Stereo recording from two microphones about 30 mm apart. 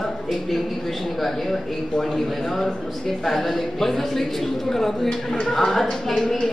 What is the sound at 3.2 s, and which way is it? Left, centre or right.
A woman's voice, centre.